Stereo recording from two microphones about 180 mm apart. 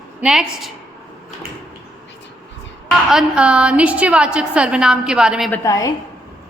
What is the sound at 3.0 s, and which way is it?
A woman's voice, 5° right (ahead or behind).